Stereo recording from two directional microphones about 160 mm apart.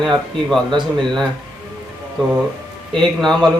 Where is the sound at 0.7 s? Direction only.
30° right (ahead or behind).